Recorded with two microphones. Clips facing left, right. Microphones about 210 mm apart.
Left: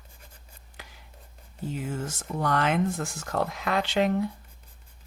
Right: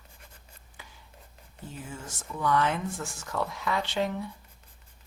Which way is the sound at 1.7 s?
65° left (ahead or behind).